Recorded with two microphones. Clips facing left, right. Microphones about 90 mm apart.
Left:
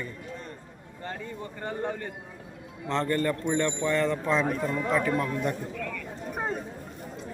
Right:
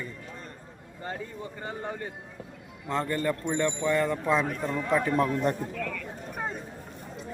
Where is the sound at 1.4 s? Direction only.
5° right (ahead or behind); by 5.1 s 20° right (ahead or behind).